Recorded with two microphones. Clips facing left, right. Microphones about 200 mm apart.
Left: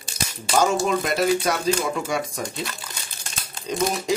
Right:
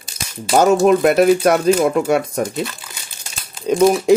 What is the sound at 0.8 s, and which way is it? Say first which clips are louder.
Speech: right 10 dB; 60° right (ahead or behind).